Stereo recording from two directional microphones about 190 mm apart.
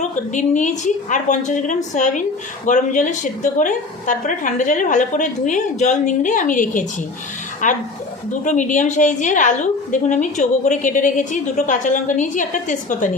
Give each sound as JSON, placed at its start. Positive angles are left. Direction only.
{"t": 0.3, "sound": "a woman's voice", "side_deg": 40}